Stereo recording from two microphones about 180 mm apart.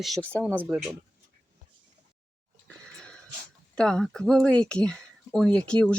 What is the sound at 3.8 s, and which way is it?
Speech, 5° left (ahead or behind).